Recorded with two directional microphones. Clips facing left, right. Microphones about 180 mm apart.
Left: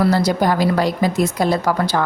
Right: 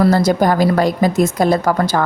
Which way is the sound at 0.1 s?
50° right (ahead or behind).